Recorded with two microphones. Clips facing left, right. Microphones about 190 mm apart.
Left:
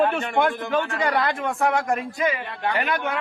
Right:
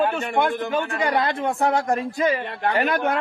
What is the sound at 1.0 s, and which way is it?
A man's voice, 25° right (ahead or behind).